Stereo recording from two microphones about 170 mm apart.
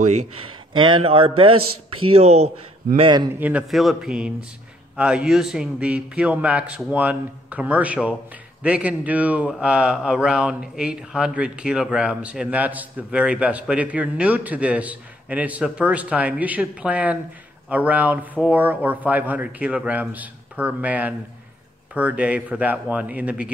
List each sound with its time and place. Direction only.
0.0 s speech: 45° right (ahead or behind)
0.7 s speech: 30° right (ahead or behind)
3.0 s a man's voice: 25° right (ahead or behind)
3.3 s a man's voice: 10° right (ahead or behind)